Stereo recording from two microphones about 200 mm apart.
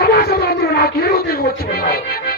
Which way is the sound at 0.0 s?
50° left (ahead or behind).